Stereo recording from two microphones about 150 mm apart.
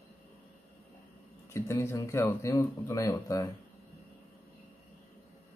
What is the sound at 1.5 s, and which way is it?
Speech, 20° left (ahead or behind).